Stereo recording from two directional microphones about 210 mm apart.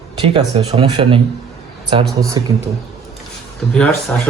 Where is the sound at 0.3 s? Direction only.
25° right (ahead or behind).